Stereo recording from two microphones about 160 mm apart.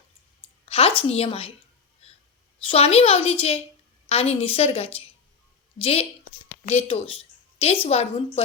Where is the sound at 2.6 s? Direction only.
35° left (ahead or behind).